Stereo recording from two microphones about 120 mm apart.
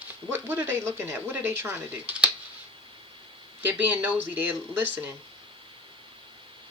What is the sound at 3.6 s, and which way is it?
Speech, 15° right (ahead or behind).